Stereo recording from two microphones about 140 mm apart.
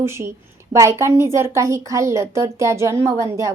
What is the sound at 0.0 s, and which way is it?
A woman's voice, 20° right (ahead or behind).